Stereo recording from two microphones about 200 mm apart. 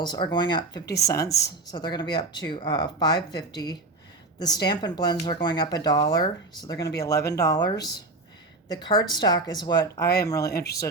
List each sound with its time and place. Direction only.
0.0 s speech: 20° left (ahead or behind)